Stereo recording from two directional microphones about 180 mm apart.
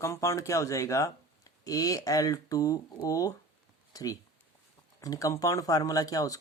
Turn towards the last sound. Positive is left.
turn(degrees=20)  # may be behind; listen again after turning